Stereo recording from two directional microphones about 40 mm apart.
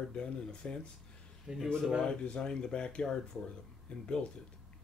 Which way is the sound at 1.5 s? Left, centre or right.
Centre.